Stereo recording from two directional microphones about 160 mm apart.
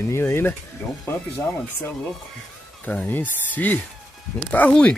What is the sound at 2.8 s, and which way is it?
Speech, 10° left (ahead or behind).